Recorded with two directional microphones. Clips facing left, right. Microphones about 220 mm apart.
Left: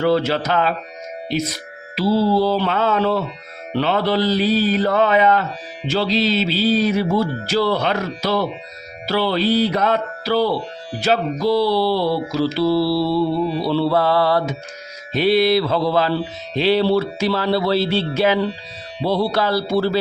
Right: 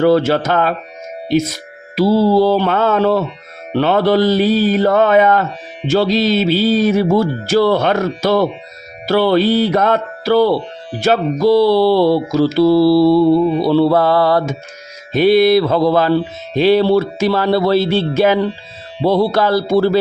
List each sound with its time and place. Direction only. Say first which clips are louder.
0.0 s mantra: right 5 dB; 45° right (ahead or behind)
2.0 s mantra: right 5 dB; 50° right (ahead or behind)